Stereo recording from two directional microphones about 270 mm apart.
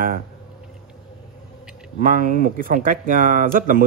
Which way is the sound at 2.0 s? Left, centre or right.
Right.